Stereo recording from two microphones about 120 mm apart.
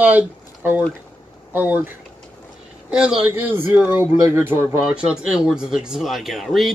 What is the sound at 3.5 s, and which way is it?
Speech, 20° right (ahead or behind).